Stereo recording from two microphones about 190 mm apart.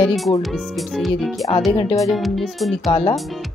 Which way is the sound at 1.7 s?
20° left (ahead or behind).